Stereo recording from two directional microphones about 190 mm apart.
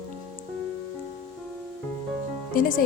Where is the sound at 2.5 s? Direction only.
45° left (ahead or behind).